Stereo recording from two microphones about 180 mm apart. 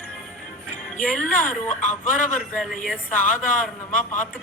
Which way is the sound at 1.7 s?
45° left (ahead or behind).